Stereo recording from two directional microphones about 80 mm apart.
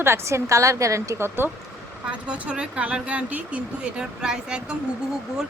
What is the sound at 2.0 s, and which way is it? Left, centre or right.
Speech, centre.